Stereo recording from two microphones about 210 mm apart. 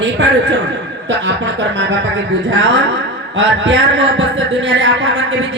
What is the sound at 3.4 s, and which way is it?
Speech, 60° right (ahead or behind).